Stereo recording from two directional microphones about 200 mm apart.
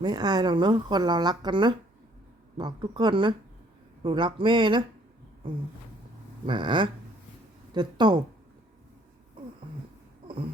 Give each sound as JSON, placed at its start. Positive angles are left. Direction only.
{"t": 0.0, "sound": "speech", "side_deg": -20}
{"t": 6.4, "sound": "speech", "side_deg": -25}